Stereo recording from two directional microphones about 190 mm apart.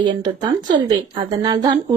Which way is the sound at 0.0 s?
25° right (ahead or behind).